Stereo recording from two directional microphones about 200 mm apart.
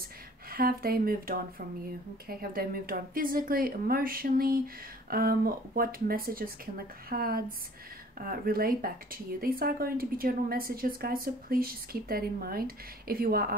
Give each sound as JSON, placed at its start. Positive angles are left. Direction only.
{"t": 0.5, "sound": "speech", "side_deg": -45}